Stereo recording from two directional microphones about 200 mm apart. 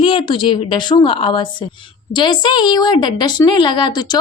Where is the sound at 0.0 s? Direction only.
25° left (ahead or behind).